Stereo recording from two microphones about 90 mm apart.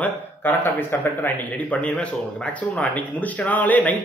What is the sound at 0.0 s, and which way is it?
A man's voice, 20° left (ahead or behind).